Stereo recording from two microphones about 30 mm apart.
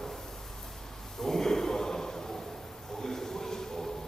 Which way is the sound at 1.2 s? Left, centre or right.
Centre.